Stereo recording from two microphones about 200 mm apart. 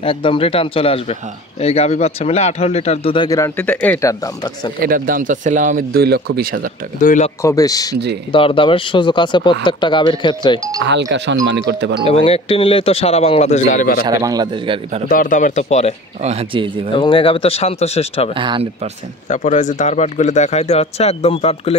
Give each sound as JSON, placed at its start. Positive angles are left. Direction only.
{"t": 0.0, "sound": "speech", "side_deg": 25}
{"t": 3.3, "sound": "speech", "side_deg": 15}
{"t": 4.8, "sound": "speech", "side_deg": -45}
{"t": 7.0, "sound": "speech", "side_deg": 40}
{"t": 7.4, "sound": "speech", "side_deg": 15}
{"t": 10.9, "sound": "speech", "side_deg": -60}
{"t": 12.1, "sound": "speech", "side_deg": 30}
{"t": 14.0, "sound": "a man's voice", "side_deg": -20}
{"t": 15.0, "sound": "speech", "side_deg": 45}
{"t": 16.3, "sound": "a man's voice", "side_deg": -30}
{"t": 16.9, "sound": "speech", "side_deg": 25}
{"t": 18.3, "sound": "a man's voice", "side_deg": -25}
{"t": 19.2, "sound": "speech", "side_deg": 35}